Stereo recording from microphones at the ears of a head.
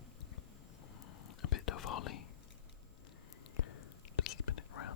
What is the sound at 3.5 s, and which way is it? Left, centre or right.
Whispering, left.